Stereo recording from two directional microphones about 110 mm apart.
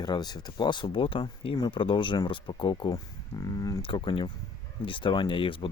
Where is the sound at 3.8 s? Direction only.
50° left (ahead or behind).